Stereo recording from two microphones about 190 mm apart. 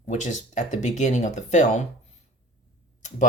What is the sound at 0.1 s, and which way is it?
Speech, 40° left (ahead or behind).